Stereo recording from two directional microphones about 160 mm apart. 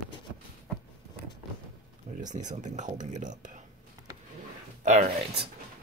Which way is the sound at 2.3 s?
50° right (ahead or behind).